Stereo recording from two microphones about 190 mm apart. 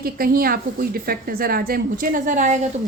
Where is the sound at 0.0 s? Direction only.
50° right (ahead or behind).